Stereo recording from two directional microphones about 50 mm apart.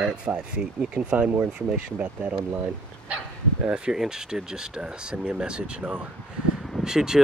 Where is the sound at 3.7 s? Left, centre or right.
Centre.